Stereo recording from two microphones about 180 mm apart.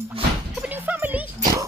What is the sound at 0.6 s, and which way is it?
Music, 10° right (ahead or behind).